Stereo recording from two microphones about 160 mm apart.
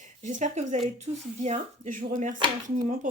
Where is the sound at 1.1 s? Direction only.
25° right (ahead or behind).